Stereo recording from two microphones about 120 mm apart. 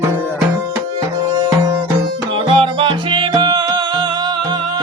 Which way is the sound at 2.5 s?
40° right (ahead or behind).